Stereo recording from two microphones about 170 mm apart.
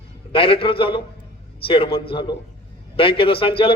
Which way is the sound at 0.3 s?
30° left (ahead or behind).